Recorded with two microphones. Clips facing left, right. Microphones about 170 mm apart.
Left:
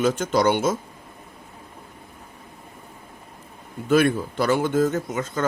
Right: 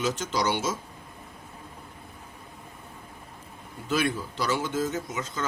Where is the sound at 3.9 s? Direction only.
55° left (ahead or behind).